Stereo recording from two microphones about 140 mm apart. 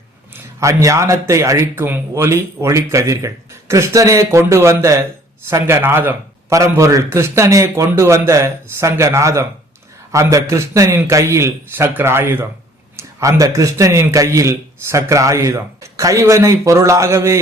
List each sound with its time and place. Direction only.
0.6 s a man's voice: 20° right (ahead or behind)